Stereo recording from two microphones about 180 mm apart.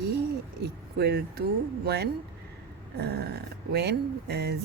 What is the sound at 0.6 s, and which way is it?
Speech, 65° right (ahead or behind).